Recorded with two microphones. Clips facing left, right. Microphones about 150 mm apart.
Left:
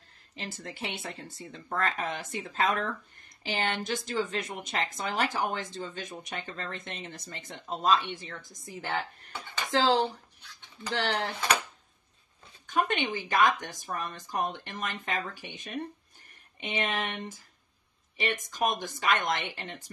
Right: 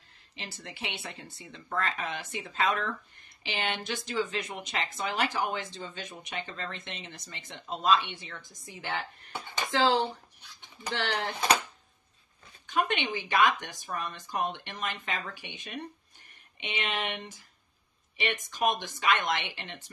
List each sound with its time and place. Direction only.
0.4 s speech: 45° left (ahead or behind)
10.4 s a sound: 15° right (ahead or behind)
10.9 s speech: 35° left (ahead or behind)
12.6 s speech: 45° left (ahead or behind)